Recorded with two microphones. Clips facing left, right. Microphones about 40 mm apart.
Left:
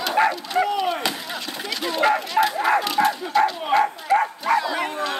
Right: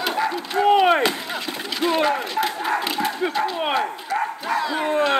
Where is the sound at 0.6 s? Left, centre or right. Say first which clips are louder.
Right 7 dB; right.